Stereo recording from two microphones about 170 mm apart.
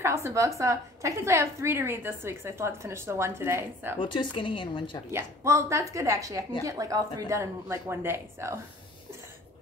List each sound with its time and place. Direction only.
0.0 s a woman's voice: 15° right (ahead or behind)
4.0 s a woman's voice: 30° left (ahead or behind)
5.1 s a woman's voice: 15° right (ahead or behind)